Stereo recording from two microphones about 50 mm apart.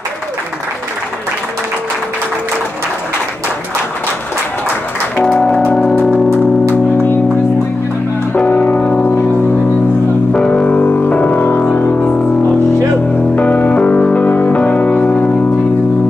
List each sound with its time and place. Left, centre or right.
6.7 s music: left
8.5 s music: left
10.3 s music: centre
10.6 s music: left
13.4 s music: left